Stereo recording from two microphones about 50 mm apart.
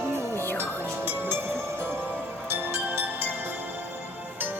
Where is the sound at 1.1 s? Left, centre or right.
Right.